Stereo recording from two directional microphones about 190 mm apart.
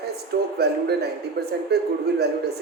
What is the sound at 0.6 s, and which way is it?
Speech, 60° right (ahead or behind).